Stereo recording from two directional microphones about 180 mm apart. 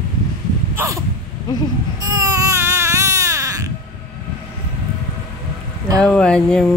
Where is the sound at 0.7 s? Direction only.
15° right (ahead or behind).